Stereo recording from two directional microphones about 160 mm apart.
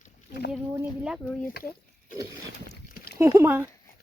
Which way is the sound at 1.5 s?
65° left (ahead or behind).